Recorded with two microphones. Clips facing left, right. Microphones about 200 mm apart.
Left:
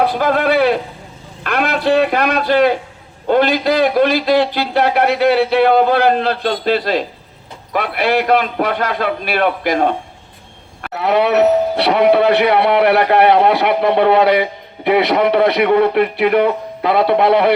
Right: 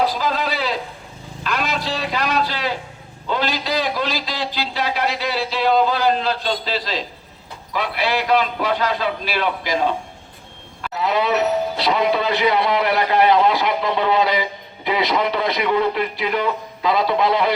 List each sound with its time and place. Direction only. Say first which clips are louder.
0.0 s speech: left 6 dB; 60° left (ahead or behind)